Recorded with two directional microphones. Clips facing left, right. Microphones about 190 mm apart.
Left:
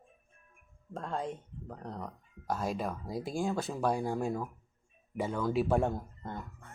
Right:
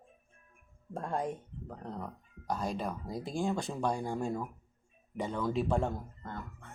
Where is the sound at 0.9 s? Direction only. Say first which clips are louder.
Right 2 dB; 15° right (ahead or behind).